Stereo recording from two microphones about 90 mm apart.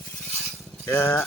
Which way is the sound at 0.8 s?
25° left (ahead or behind).